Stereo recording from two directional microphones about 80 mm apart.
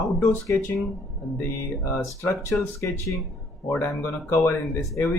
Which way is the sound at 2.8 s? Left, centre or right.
Left.